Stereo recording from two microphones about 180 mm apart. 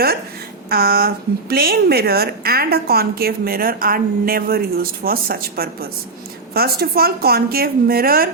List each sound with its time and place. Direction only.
0.7 s speech: 55° right (ahead or behind)